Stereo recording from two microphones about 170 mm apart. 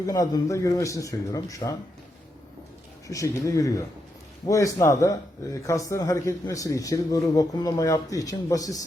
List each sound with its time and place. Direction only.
0.0 s a man's voice: 20° left (ahead or behind)
3.1 s a man's voice: 20° left (ahead or behind)